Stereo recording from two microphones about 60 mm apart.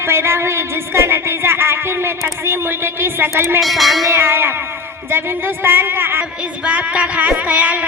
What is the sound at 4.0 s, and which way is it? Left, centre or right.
A man's voice, right.